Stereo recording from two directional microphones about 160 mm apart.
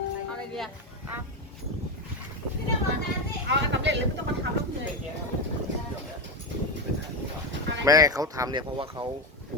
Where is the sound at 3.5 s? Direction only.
90° right.